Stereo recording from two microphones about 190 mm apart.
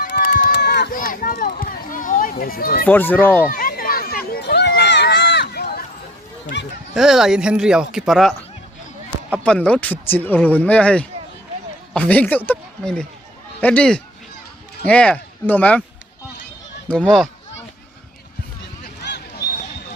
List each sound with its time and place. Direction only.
0.0 s run: 60° left (ahead or behind)
2.8 s speech: 10° left (ahead or behind)
3.5 s a sound: 50° left (ahead or behind)
6.9 s speech: centre (ahead or behind)
9.4 s speech: 5° left (ahead or behind)
16.9 s speech: 5° left (ahead or behind)
19.0 s a sound: 60° left (ahead or behind)